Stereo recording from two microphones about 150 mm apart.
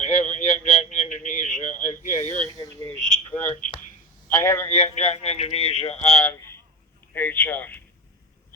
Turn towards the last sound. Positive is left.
turn(degrees=10)  # may be behind; listen again after turning